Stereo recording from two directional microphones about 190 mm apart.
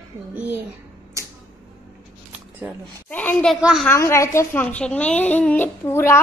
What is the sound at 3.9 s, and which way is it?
A woman's voice, 15° left (ahead or behind).